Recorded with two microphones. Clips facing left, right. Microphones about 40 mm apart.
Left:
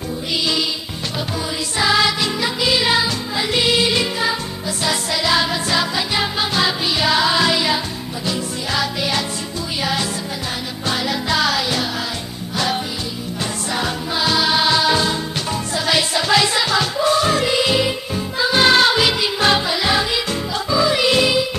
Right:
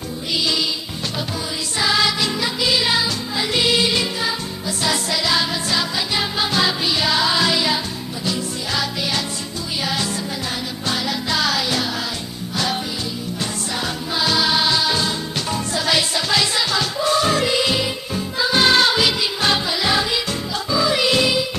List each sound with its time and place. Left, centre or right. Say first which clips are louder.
1.8 s music: left 2 dB; left
6.5 s music: right 1 dB; centre
10.9 s music: left 3 dB; left
14.1 s music: left 1 dB; centre; by 15.1 s left
15.5 s music: left 1 dB; centre
16.2 s music: left 3 dB; left
17.0 s music: even; centre